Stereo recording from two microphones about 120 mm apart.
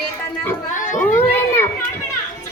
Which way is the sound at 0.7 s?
90° left.